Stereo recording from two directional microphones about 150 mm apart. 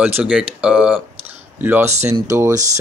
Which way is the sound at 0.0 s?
10° right (ahead or behind).